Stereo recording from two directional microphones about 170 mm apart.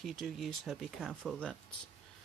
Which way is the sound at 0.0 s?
Centre (ahead or behind).